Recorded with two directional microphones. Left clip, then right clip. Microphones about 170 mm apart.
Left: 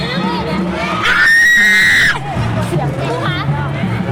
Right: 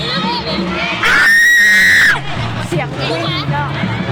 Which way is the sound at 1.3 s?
20° left (ahead or behind).